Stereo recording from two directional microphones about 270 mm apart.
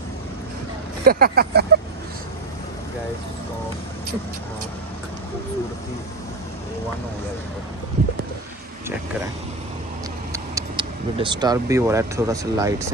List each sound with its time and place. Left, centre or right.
1.0 s speech: right
10.3 s speech: centre